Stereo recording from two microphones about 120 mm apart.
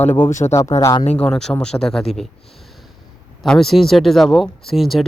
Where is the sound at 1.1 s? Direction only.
5° left (ahead or behind).